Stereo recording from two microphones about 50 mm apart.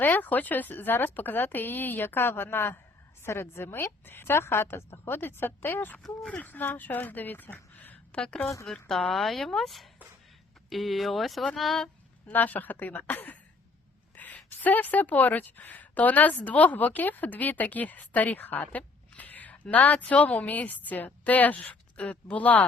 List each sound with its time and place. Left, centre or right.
0.0 s a woman's voice: left
8.1 s a woman's voice: centre
9.1 s speech: centre
12.3 s a woman's voice: left